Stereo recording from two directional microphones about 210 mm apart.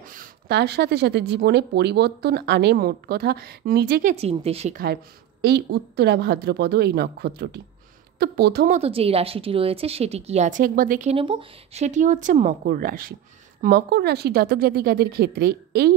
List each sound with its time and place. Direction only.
0.0 s speech: 40° right (ahead or behind)
4.1 s speech: 30° right (ahead or behind)
5.4 s a woman's voice: 50° right (ahead or behind)